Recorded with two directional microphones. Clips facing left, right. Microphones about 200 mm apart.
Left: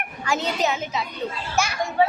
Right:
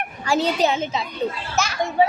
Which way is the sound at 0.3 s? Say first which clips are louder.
Right 4 dB; 30° right (ahead or behind).